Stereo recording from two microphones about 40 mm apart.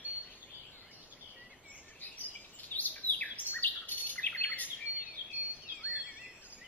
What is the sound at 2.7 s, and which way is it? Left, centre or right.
Bird, left.